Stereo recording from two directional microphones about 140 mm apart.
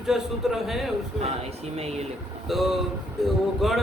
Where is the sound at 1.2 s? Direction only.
50° right (ahead or behind).